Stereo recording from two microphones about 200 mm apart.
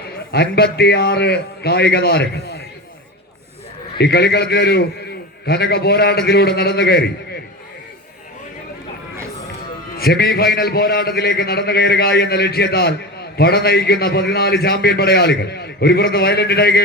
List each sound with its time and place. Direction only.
0.3 s a man's voice: 50° left (ahead or behind)
3.9 s a man's voice: 55° left (ahead or behind)
10.0 s a man's voice: 50° left (ahead or behind)